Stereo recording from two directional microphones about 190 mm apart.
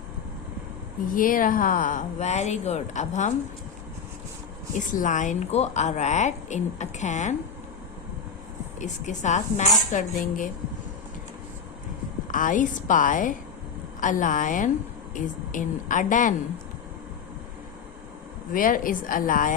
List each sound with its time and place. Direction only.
1.1 s a woman's voice: 45° left (ahead or behind)
4.8 s a woman's voice: 40° left (ahead or behind)
8.8 s a woman's voice: 40° left (ahead or behind)
12.3 s a woman's voice: 45° left (ahead or behind)
18.5 s a woman's voice: 45° left (ahead or behind)